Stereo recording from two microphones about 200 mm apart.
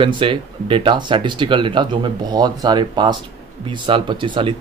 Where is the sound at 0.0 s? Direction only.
25° right (ahead or behind).